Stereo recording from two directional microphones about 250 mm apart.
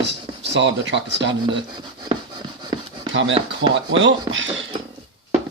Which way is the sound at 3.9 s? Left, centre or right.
Right.